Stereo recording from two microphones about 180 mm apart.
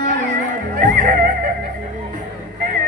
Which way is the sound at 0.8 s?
45° right (ahead or behind).